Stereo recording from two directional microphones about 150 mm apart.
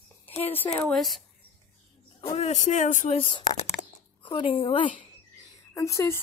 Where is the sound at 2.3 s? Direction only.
50° left (ahead or behind).